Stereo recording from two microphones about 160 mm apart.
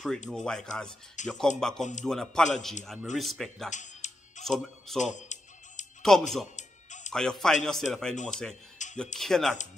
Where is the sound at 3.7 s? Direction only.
50° left (ahead or behind).